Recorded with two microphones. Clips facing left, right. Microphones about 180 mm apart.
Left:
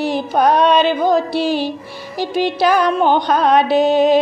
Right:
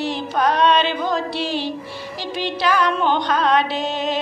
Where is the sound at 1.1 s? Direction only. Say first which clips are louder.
Left 7 dB; 10° left (ahead or behind).